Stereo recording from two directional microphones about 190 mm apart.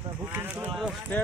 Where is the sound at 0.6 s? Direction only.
Centre (ahead or behind).